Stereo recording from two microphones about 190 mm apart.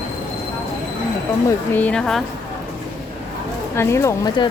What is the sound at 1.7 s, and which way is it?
Speech, 10° left (ahead or behind).